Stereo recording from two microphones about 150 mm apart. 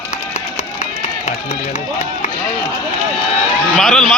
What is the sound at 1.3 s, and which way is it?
Run, 50° left (ahead or behind).